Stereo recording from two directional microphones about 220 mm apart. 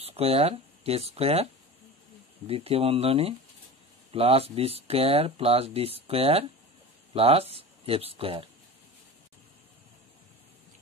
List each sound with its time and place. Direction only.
0.0 s speech: 25° right (ahead or behind)